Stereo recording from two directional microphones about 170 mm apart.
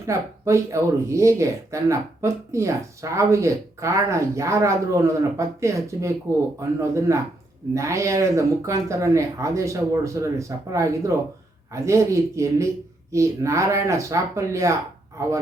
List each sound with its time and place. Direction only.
0.1 s speech: 15° right (ahead or behind)